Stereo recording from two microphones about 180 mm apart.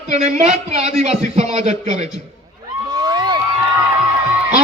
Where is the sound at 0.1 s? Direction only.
40° right (ahead or behind).